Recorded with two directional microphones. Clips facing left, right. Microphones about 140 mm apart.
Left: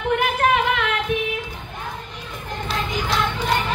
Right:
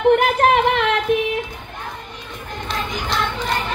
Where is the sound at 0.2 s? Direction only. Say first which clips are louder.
Right 4 dB; 40° right (ahead or behind).